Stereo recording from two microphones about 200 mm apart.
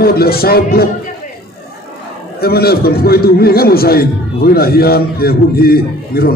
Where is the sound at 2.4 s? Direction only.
50° left (ahead or behind).